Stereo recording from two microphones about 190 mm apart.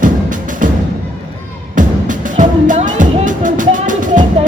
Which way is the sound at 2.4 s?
40° right (ahead or behind).